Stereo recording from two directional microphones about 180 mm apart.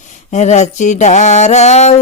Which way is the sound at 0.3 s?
40° left (ahead or behind).